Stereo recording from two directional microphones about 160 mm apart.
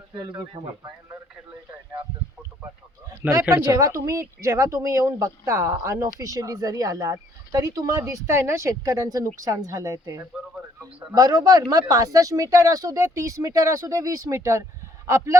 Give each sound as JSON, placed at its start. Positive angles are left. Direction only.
{"t": 0.1, "sound": "speech", "side_deg": -25}
{"t": 3.4, "sound": "speech", "side_deg": -20}